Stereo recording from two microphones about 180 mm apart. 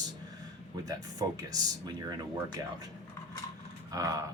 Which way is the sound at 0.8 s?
20° right (ahead or behind).